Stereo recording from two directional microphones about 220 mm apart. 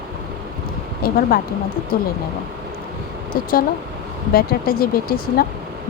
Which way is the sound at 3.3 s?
40° left (ahead or behind).